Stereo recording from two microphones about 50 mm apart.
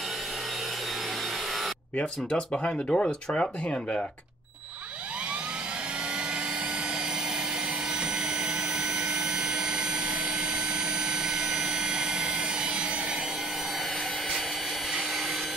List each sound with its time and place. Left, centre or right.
2.6 s speech: centre